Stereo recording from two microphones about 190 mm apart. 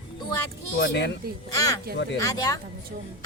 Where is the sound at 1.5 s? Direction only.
20° left (ahead or behind).